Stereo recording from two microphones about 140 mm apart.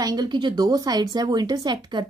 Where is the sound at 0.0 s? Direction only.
30° right (ahead or behind).